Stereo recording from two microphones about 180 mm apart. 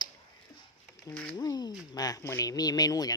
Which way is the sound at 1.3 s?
20° left (ahead or behind).